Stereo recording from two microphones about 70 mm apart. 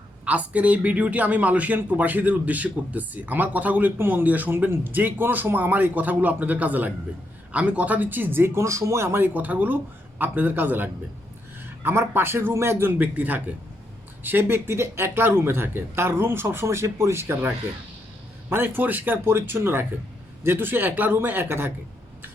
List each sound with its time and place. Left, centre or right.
0.3 s a man's voice: centre; by 9.0 s right
9.1 s a man's voice: right
18.4 s speech: right